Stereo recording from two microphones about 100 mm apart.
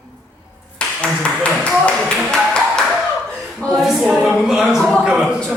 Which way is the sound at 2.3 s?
10° left (ahead or behind).